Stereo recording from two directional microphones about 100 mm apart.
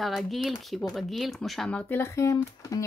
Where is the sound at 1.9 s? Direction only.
25° left (ahead or behind).